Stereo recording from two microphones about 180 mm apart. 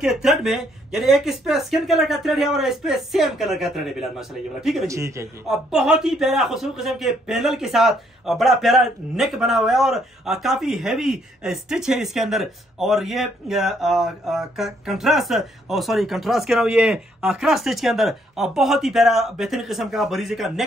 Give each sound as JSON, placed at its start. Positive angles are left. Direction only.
{"t": 0.0, "sound": "speech", "side_deg": -5}
{"t": 4.8, "sound": "a man's voice", "side_deg": -15}
{"t": 5.5, "sound": "speech", "side_deg": 0}